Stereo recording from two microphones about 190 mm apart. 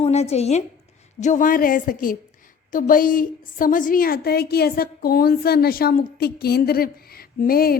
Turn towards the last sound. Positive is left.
turn(degrees=50)  # may be behind; listen again after turning